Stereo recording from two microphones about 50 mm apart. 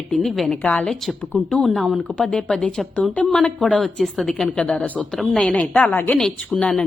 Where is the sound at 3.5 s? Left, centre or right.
Centre.